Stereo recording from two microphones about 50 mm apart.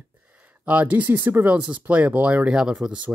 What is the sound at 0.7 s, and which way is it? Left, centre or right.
Speech, right.